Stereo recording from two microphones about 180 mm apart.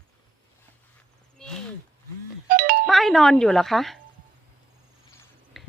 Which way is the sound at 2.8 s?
Centre (ahead or behind).